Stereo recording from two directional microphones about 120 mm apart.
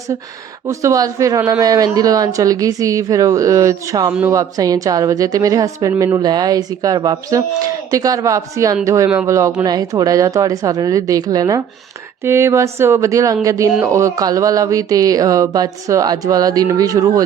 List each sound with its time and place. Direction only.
0.7 s a man's voice: 25° right (ahead or behind)